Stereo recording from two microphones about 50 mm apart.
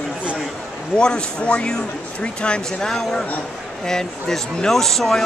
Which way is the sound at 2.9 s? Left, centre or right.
Centre.